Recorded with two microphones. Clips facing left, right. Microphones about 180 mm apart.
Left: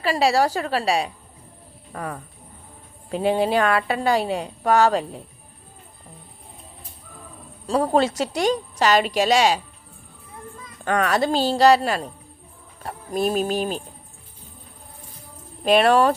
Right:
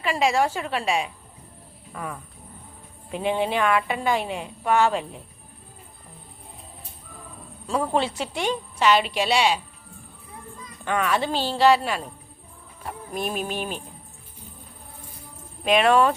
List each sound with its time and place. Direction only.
0.0 s a woman's voice: 35° left (ahead or behind)
7.7 s a woman's voice: 35° left (ahead or behind)
10.8 s a woman's voice: 40° left (ahead or behind)
15.6 s a woman's voice: 35° left (ahead or behind)